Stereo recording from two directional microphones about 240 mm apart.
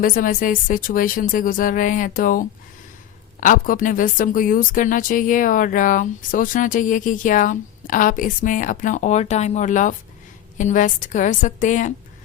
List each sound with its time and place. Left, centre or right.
0.0 s speech: left
3.4 s speech: left